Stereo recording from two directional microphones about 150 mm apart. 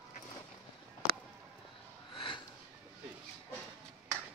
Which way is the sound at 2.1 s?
35° left (ahead or behind).